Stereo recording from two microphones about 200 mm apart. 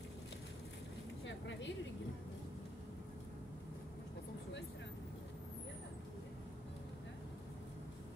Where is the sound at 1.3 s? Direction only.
65° left (ahead or behind).